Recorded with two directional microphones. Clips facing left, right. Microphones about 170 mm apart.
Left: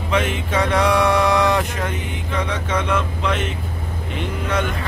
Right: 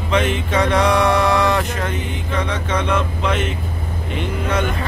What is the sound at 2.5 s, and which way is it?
Speech, 5° left (ahead or behind).